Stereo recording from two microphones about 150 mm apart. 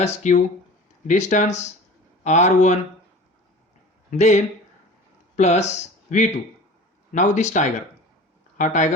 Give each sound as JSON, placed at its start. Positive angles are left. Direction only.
{"t": 0.0, "sound": "speech", "side_deg": 50}
{"t": 4.2, "sound": "speech", "side_deg": 50}